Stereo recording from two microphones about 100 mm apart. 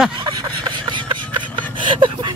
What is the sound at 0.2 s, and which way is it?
Vehicle, 50° right (ahead or behind).